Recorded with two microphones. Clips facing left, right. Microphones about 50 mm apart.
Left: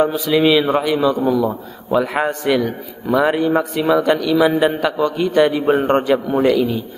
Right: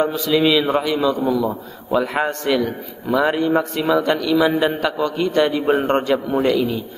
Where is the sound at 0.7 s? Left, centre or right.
Centre.